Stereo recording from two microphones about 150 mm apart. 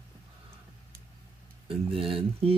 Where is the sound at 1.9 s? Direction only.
40° right (ahead or behind).